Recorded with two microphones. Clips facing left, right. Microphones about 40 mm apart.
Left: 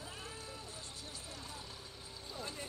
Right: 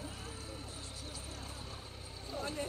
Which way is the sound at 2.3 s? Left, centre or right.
Right.